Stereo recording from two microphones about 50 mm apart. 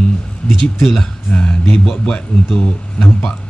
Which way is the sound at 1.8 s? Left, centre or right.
Centre.